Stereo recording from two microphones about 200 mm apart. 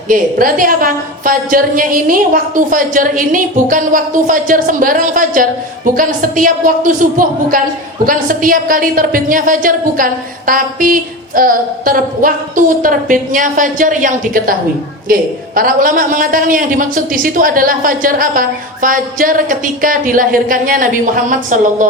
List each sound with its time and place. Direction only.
0.1 s a woman's voice: 45° right (ahead or behind)